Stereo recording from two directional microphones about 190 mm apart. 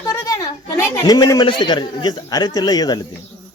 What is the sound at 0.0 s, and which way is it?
A woman's voice, 20° left (ahead or behind).